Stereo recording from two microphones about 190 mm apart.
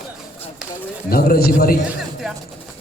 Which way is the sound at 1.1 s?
50° left (ahead or behind).